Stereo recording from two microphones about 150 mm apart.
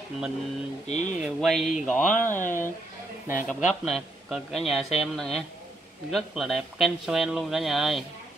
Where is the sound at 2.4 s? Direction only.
60° left (ahead or behind).